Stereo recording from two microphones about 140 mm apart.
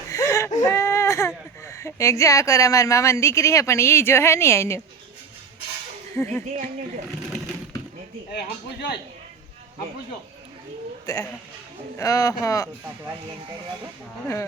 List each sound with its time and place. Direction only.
0.1 s whimper: 20° left (ahead or behind)
1.6 s speech: 20° left (ahead or behind)
6.1 s speech: 15° left (ahead or behind)
6.4 s speech: 60° right (ahead or behind)
11.0 s speech: 20° left (ahead or behind)